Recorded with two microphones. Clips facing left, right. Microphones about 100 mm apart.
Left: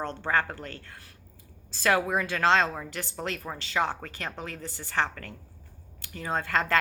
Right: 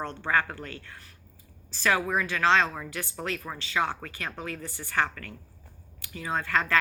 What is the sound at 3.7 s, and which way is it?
A woman's voice, 30° left (ahead or behind).